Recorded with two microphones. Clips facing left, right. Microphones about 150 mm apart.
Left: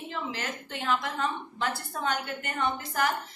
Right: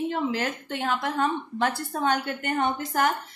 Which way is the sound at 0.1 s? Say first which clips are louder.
Right 8 dB; 50° right (ahead or behind).